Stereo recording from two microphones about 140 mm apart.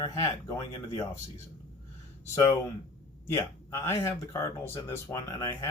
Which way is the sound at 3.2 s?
20° left (ahead or behind).